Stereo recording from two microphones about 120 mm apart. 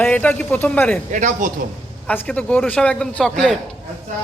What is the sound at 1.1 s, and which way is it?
Speech, 90° right.